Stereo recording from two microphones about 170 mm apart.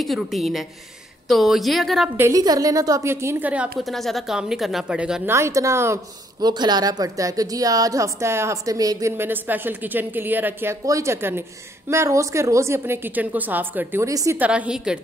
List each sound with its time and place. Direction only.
0.0 s a woman's voice: centre (ahead or behind)
2.1 s a woman's voice: 20° right (ahead or behind)
5.3 s a woman's voice: 15° right (ahead or behind)